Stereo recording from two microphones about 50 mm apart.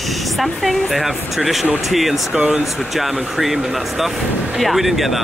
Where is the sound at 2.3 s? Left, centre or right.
Right.